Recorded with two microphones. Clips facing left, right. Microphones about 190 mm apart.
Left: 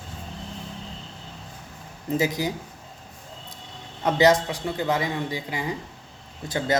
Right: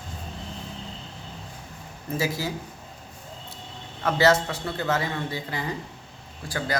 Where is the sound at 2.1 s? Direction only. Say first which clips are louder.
Left 3 dB; 20° left (ahead or behind).